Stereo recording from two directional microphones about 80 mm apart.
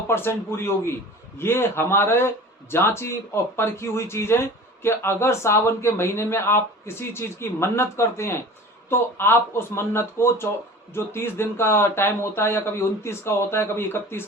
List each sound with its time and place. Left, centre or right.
0.1 s speech: left